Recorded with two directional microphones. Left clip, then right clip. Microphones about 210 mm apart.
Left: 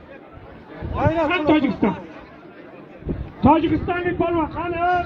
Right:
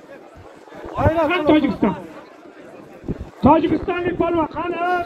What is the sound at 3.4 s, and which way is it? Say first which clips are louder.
A man's voice: right 2 dB; 30° left (ahead or behind).